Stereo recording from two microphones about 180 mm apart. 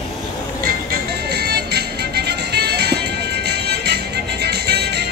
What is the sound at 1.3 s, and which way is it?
Music, 65° right (ahead or behind).